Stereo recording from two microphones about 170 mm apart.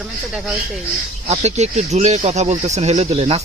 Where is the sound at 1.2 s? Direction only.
40° right (ahead or behind).